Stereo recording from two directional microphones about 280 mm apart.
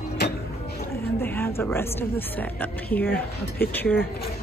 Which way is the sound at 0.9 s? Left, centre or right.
Centre.